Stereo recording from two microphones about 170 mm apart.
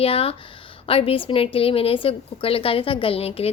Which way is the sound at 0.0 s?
35° left (ahead or behind).